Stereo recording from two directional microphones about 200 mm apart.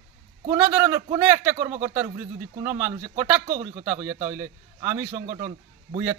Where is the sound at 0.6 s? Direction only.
10° right (ahead or behind).